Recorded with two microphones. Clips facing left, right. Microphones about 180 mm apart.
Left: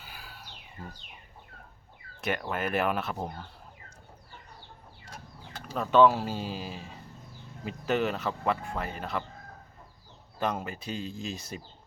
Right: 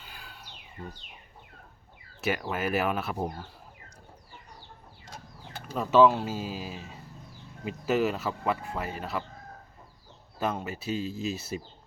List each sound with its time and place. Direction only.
0.0 s bird: 5° left (ahead or behind)
2.2 s speech: 5° right (ahead or behind)
5.7 s speech: 5° right (ahead or behind)
10.4 s speech: 5° right (ahead or behind)